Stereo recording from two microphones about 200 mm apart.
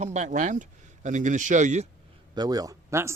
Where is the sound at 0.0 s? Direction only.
35° right (ahead or behind).